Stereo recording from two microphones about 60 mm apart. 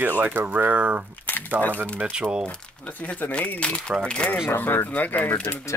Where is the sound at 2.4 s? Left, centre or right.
Left.